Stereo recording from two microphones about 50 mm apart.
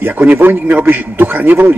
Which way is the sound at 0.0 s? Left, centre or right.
Right.